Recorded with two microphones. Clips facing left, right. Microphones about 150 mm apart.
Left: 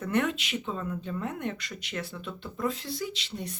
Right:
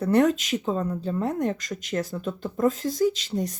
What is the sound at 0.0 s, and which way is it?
Speech, 35° right (ahead or behind).